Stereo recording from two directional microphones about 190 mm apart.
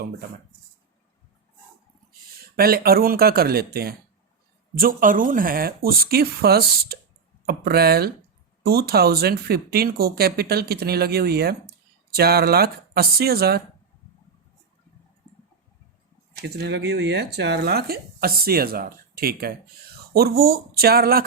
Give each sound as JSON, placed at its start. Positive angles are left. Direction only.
{"t": 2.4, "sound": "speech", "side_deg": -50}
{"t": 16.4, "sound": "speech", "side_deg": -65}